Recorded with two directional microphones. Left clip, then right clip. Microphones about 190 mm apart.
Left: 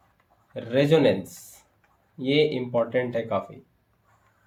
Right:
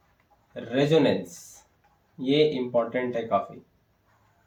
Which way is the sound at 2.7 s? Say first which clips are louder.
Left 1 dB; 50° left (ahead or behind).